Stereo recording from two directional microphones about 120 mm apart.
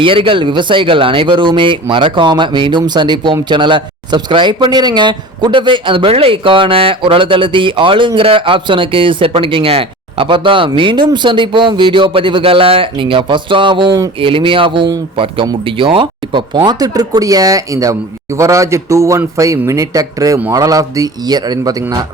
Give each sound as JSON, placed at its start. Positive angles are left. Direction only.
{"t": 0.0, "sound": "speech", "side_deg": -45}